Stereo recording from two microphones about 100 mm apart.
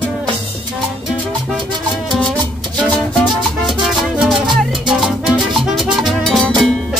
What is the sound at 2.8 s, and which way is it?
Music, 10° left (ahead or behind).